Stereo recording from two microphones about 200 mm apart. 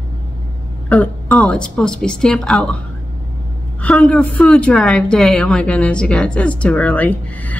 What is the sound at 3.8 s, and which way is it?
A woman's voice, 5° left (ahead or behind).